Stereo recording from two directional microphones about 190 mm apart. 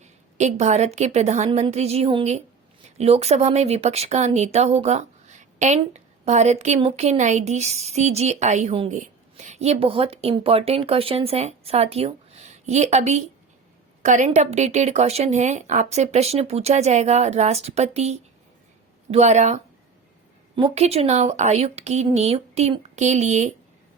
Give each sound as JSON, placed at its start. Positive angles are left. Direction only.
{"t": 0.3, "sound": "speech", "side_deg": -35}
{"t": 20.6, "sound": "speech", "side_deg": -30}